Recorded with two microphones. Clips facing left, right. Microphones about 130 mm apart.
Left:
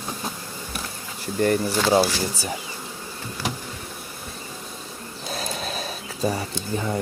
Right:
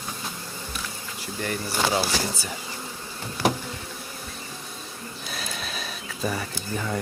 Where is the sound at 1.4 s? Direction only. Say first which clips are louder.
Left 7 dB; 40° left (ahead or behind).